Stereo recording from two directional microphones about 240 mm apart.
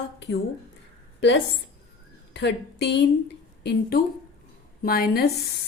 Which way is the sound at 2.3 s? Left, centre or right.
Left.